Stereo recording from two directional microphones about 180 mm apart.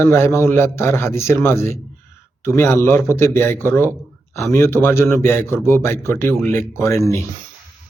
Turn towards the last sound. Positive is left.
turn(degrees=15)  # may be behind; listen again after turning